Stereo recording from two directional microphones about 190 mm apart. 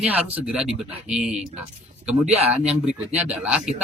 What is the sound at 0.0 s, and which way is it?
Speech, 10° right (ahead or behind).